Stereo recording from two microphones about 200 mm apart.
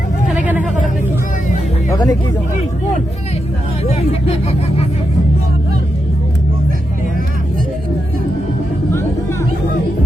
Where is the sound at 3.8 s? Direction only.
30° left (ahead or behind).